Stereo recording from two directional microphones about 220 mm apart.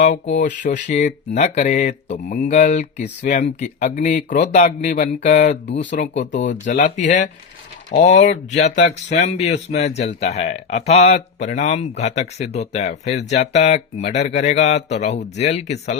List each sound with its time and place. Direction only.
0.0 s speech: 30° left (ahead or behind)